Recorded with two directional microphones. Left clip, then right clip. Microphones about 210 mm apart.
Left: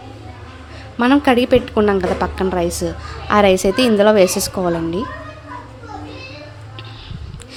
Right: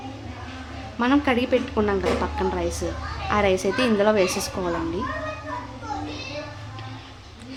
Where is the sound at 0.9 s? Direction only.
30° left (ahead or behind).